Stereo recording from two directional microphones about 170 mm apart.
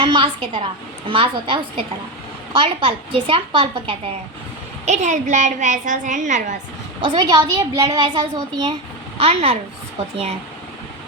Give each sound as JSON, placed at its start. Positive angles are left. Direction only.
{"t": 0.0, "sound": "a woman's voice", "side_deg": -30}
{"t": 4.9, "sound": "a woman's voice", "side_deg": -45}
{"t": 7.0, "sound": "a woman's voice", "side_deg": -25}
{"t": 9.1, "sound": "a woman's voice", "side_deg": -35}